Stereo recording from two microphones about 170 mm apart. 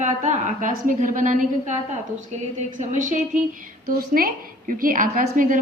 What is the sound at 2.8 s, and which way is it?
Speech, 45° right (ahead or behind).